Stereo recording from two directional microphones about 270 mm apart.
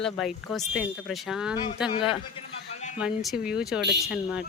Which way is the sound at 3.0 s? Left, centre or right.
Centre.